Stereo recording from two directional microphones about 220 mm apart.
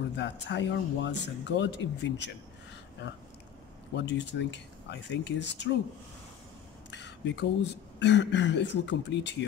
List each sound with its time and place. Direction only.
0.2 s speech: 55° left (ahead or behind)
3.9 s speech: 55° left (ahead or behind)
6.9 s speech: 55° left (ahead or behind)